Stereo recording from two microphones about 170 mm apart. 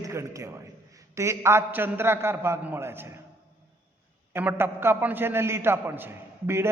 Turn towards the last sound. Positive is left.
turn(degrees=-15)  # may be behind; listen again after turning